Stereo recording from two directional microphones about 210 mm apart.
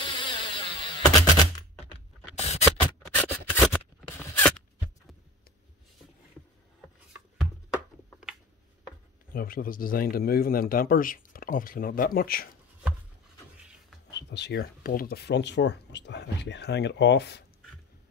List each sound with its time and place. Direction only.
0.0 s insect: 25° left (ahead or behind)
2.3 s scratch: 30° left (ahead or behind)
3.2 s scissors: 10° left (ahead or behind)
4.4 s a sound: 5° left (ahead or behind)
9.3 s speech: 45° left (ahead or behind)
14.3 s speech: 55° left (ahead or behind)